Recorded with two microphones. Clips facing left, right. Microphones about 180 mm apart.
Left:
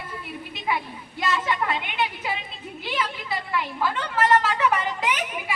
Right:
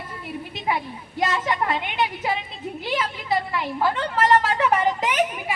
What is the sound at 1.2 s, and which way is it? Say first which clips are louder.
Speech: right 2 dB; 40° right (ahead or behind).